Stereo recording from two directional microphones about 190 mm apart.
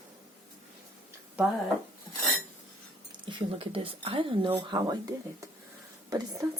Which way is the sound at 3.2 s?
30° right (ahead or behind).